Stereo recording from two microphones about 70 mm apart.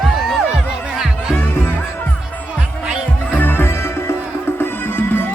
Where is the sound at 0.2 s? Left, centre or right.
Centre.